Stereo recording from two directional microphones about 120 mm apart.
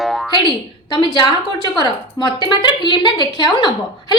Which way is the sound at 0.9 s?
40° left (ahead or behind).